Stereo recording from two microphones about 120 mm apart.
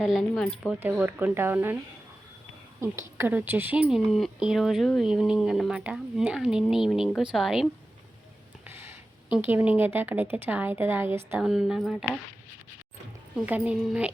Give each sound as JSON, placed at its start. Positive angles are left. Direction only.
{"t": 0.0, "sound": "speech", "side_deg": -5}
{"t": 0.8, "sound": "speech", "side_deg": -15}
{"t": 2.8, "sound": "a woman's voice", "side_deg": -25}
{"t": 3.8, "sound": "speech", "side_deg": 0}
{"t": 8.6, "sound": "a sound", "side_deg": -20}
{"t": 9.3, "sound": "speech", "side_deg": -15}
{"t": 11.3, "sound": "speech", "side_deg": -5}
{"t": 13.3, "sound": "speech", "side_deg": -10}